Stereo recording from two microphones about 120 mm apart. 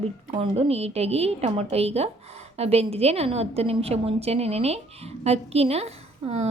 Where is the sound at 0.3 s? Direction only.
60° right (ahead or behind).